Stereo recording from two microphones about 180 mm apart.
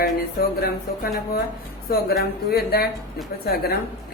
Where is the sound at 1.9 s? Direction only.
55° left (ahead or behind).